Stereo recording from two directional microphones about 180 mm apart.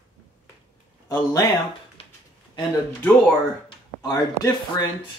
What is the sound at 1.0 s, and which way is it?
Speech, 20° left (ahead or behind).